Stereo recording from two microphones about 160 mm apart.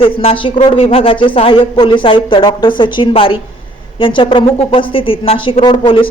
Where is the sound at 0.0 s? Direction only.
35° left (ahead or behind).